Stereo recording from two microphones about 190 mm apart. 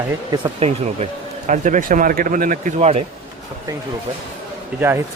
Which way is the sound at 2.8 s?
35° right (ahead or behind).